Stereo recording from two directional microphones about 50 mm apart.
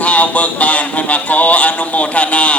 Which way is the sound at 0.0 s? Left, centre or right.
Left.